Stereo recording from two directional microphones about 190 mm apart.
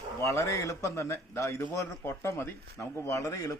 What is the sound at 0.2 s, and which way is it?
A man's voice, 15° left (ahead or behind).